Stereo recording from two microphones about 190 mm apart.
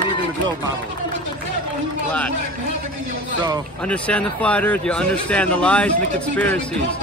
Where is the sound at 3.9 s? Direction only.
5° left (ahead or behind).